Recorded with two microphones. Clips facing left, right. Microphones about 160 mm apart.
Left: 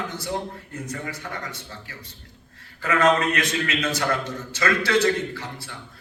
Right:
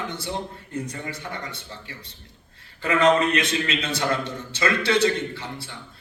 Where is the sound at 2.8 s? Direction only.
25° right (ahead or behind).